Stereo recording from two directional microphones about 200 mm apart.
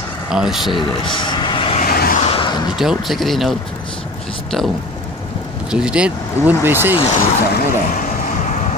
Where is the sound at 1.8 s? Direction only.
50° left (ahead or behind).